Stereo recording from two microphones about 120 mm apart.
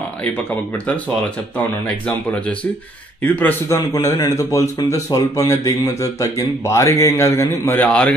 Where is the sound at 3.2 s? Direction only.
15° left (ahead or behind).